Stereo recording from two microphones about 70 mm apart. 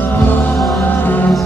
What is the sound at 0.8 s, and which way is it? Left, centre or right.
Music, left.